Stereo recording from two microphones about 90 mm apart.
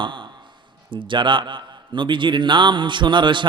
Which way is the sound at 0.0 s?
65° right (ahead or behind).